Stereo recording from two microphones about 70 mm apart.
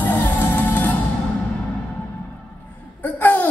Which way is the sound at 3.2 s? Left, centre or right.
Left.